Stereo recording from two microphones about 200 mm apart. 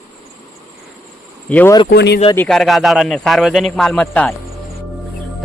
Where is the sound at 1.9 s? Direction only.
55° left (ahead or behind).